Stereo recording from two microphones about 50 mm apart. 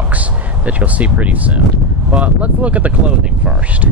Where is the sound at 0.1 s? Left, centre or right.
Right.